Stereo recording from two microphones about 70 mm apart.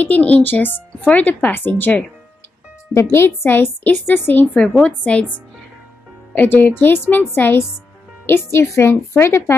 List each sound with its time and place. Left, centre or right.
0.0 s speech: left
2.9 s a woman's voice: left; by 5.2 s centre
6.3 s a woman's voice: left